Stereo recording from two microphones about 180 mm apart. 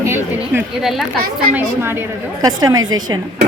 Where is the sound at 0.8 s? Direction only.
Centre (ahead or behind).